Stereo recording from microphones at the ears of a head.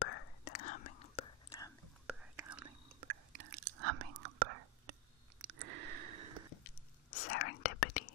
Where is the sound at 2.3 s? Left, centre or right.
Right.